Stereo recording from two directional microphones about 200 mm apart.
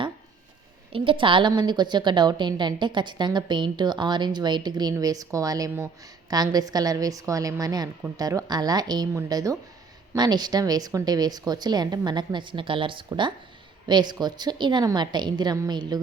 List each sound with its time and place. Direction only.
0.9 s a woman's voice: 25° right (ahead or behind)